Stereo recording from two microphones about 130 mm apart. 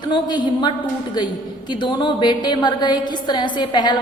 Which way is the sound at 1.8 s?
40° left (ahead or behind).